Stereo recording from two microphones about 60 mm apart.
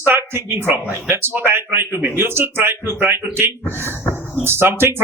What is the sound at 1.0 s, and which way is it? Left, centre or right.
A man's voice, right.